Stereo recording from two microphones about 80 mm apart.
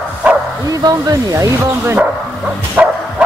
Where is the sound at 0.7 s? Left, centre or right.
Right.